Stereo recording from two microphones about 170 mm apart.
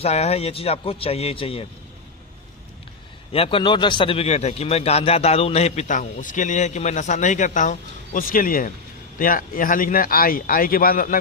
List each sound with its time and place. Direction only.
0.0 s a man's voice: 40° left (ahead or behind)
3.3 s a man's voice: 30° left (ahead or behind); by 11.1 s 55° left (ahead or behind)